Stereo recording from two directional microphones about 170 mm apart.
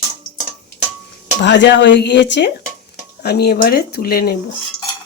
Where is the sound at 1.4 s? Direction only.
90° left.